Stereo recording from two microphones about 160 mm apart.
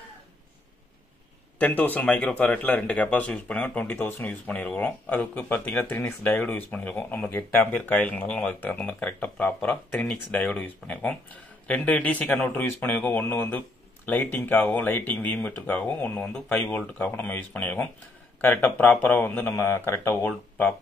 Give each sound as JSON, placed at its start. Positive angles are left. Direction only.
{"t": 1.6, "sound": "speech", "side_deg": 10}